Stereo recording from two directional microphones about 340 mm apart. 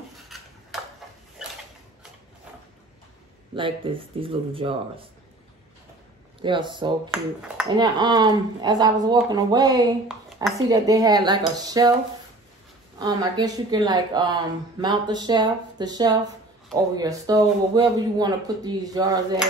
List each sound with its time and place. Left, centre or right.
0.3 s a sound: centre
3.5 s speech: centre
6.4 s speech: centre
7.1 s speech: centre
13.0 s speech: centre